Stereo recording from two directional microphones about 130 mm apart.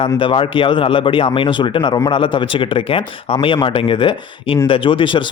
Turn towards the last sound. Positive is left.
turn(degrees=40)  # may be behind; listen again after turning